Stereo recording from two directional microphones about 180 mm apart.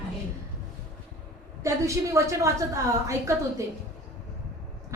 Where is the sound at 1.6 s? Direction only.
15° right (ahead or behind).